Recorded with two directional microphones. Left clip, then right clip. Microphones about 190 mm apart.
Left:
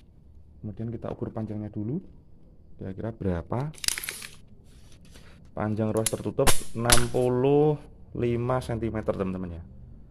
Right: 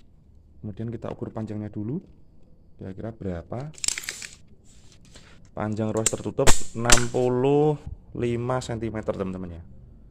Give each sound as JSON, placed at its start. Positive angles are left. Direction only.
{"t": 0.7, "sound": "speech", "side_deg": -20}
{"t": 1.1, "sound": "speech", "side_deg": -5}
{"t": 2.8, "sound": "speech", "side_deg": 5}
{"t": 5.5, "sound": "speech", "side_deg": -5}